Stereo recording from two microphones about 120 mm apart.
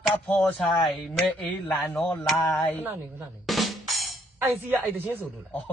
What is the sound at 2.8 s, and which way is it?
Speech, 15° right (ahead or behind).